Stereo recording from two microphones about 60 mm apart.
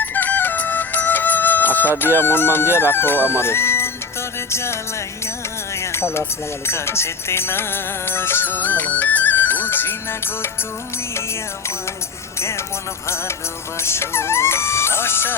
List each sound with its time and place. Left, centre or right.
0.0 s music: left
2.7 s speech: left
4.5 s music: left
5.7 s a sound: left
6.7 s music: left
12.4 s speech: left
13.7 s music: left